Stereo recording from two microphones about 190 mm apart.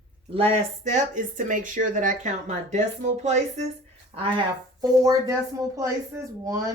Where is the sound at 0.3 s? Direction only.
35° right (ahead or behind); by 6.6 s 15° right (ahead or behind).